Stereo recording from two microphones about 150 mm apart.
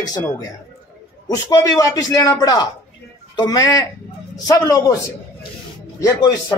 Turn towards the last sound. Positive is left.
turn(degrees=25)  # may be behind; listen again after turning